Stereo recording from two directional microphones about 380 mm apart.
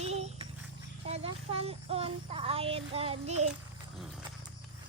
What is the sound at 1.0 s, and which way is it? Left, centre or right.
Child singing, centre.